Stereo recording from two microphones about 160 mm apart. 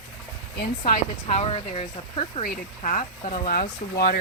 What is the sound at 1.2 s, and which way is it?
Speech, 40° left (ahead or behind).